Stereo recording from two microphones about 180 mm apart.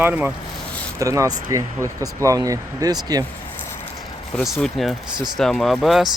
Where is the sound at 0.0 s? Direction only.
10° right (ahead or behind).